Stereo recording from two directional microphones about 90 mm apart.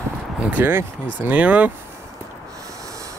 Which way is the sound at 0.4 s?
20° right (ahead or behind).